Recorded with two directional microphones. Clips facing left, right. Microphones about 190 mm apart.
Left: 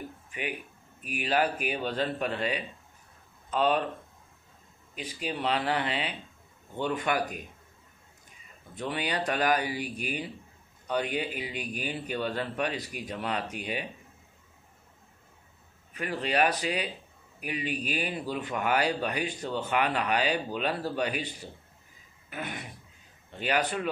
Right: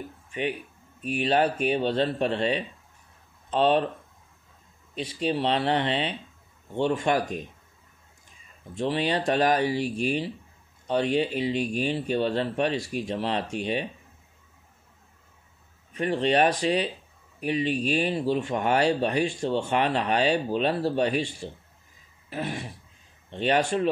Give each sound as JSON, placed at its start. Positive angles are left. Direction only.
{"t": 0.3, "sound": "speech", "side_deg": -30}
{"t": 4.9, "sound": "speech", "side_deg": -30}
{"t": 8.7, "sound": "speech", "side_deg": -30}
{"t": 15.9, "sound": "speech", "side_deg": -30}
{"t": 22.3, "sound": "speech", "side_deg": -30}